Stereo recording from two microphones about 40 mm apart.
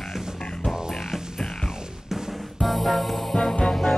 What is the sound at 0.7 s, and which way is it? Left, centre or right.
Music, centre.